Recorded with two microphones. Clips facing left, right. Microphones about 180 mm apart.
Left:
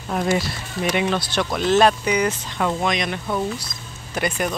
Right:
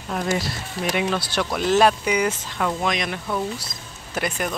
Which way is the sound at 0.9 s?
5° right (ahead or behind).